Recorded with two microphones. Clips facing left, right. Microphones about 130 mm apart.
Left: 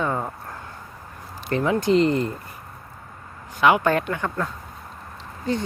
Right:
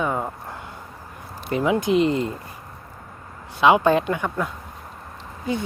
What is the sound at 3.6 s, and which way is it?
Speech, 20° right (ahead or behind).